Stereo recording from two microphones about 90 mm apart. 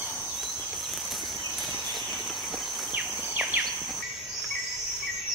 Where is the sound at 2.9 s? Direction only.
15° right (ahead or behind).